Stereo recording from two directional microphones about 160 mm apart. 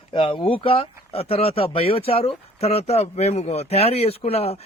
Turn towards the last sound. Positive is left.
turn(degrees=40)  # may be behind; listen again after turning